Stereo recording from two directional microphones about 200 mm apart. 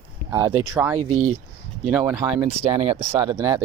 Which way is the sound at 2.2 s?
25° right (ahead or behind).